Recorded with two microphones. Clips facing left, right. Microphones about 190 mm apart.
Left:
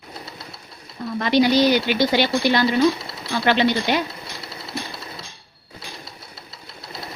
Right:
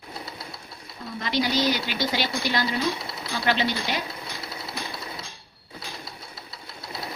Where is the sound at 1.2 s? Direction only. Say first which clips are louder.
Left 8 dB; 65° left (ahead or behind).